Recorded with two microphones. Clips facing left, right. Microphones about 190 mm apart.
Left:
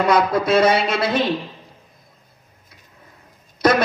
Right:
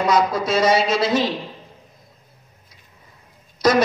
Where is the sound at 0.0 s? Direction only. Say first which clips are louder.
Left 2 dB; 60° left (ahead or behind).